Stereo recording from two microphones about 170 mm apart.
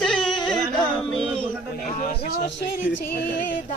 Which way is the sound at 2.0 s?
55° left (ahead or behind).